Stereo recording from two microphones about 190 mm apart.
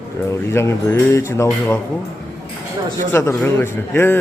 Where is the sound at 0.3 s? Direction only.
15° left (ahead or behind).